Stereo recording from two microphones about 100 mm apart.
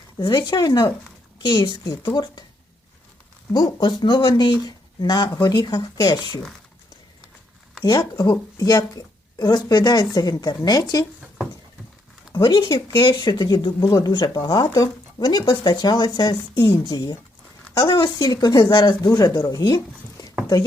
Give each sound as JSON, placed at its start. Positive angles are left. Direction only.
{"t": 0.3, "sound": "speech", "side_deg": 45}
{"t": 3.5, "sound": "a woman's voice", "side_deg": 45}
{"t": 7.9, "sound": "a woman's voice", "side_deg": 40}
{"t": 12.3, "sound": "a woman's voice", "side_deg": 45}
{"t": 12.9, "sound": "speech", "side_deg": 55}
{"t": 19.0, "sound": "speech", "side_deg": 35}